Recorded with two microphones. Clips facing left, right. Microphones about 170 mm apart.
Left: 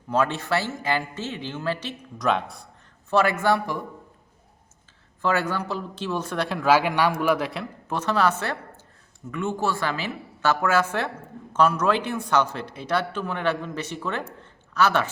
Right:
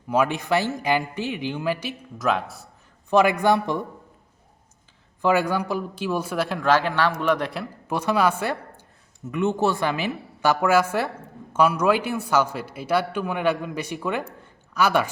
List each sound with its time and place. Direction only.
0.1 s a man's voice: 10° right (ahead or behind)
3.1 s a man's voice: 15° right (ahead or behind)
5.2 s a man's voice: 15° right (ahead or behind)
7.9 s a man's voice: 10° right (ahead or behind)